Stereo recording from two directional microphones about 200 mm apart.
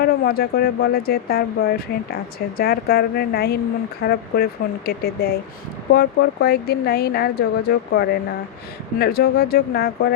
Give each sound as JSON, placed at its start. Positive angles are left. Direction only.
{"t": 0.0, "sound": "speech", "side_deg": 50}